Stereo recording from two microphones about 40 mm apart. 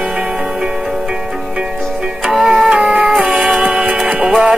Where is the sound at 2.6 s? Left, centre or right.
Centre.